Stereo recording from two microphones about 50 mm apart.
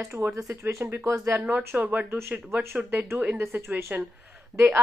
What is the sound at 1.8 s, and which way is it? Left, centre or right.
Speech, right.